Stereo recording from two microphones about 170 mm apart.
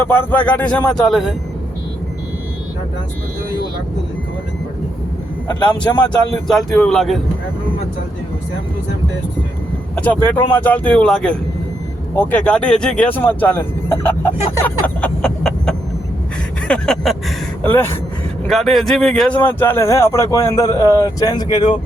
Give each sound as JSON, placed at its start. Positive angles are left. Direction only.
{"t": 0.0, "sound": "speech", "side_deg": 10}
{"t": 5.5, "sound": "speech", "side_deg": 25}
{"t": 6.1, "sound": "speech", "side_deg": 5}
{"t": 9.9, "sound": "speech", "side_deg": 10}
{"t": 16.6, "sound": "vehicle", "side_deg": 5}
{"t": 18.4, "sound": "speech", "side_deg": 0}
{"t": 19.5, "sound": "speech", "side_deg": 15}